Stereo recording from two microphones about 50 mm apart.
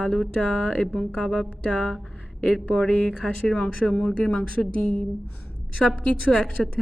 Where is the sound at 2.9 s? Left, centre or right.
Centre.